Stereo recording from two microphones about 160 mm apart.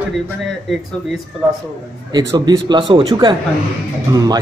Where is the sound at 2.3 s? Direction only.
25° right (ahead or behind).